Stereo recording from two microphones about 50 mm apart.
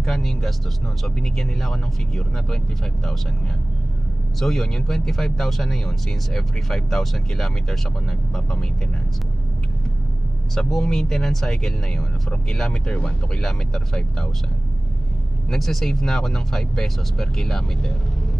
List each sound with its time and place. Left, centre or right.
0.0 s speech: centre
4.4 s speech: centre
10.5 s speech: centre
13.4 s speech: centre
15.5 s speech: centre